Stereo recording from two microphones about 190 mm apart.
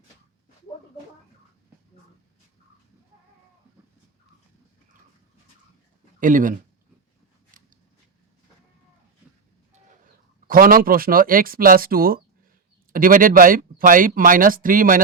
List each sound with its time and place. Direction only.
6.1 s speech: 45° right (ahead or behind)
7.5 s scissors: 45° right (ahead or behind)
10.4 s speech: 50° right (ahead or behind)